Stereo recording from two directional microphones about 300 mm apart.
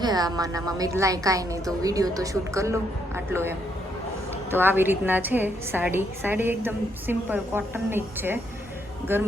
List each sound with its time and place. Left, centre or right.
0.0 s a woman's voice: centre
4.5 s a woman's voice: centre